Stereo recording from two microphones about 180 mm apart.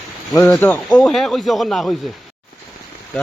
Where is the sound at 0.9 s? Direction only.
Centre (ahead or behind).